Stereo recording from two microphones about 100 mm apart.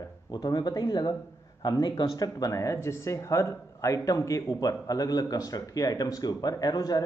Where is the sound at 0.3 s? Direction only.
40° left (ahead or behind).